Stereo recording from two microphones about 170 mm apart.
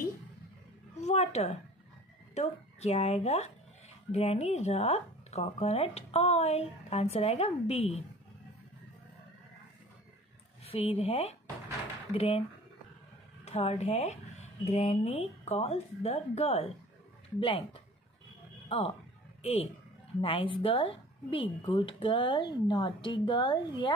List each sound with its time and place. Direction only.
1.0 s a sound: 40° left (ahead or behind)
2.3 s speech: 40° left (ahead or behind)
10.6 s speech: 35° left (ahead or behind)
13.5 s speech: 40° left (ahead or behind)